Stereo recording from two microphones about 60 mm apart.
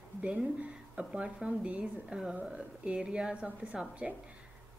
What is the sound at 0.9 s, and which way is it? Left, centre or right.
A woman's voice, centre.